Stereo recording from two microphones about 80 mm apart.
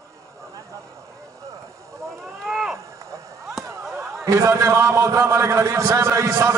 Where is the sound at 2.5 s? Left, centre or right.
Centre.